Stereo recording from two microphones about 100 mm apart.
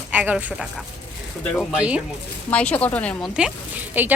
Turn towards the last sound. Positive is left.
turn(degrees=-20)  # may be behind; listen again after turning